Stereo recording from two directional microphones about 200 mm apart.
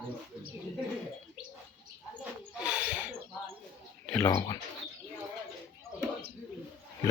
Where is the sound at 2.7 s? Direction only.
5° right (ahead or behind).